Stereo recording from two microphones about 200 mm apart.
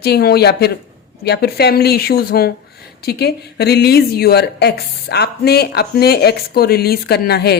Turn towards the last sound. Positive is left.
turn(degrees=55)  # may be behind; listen again after turning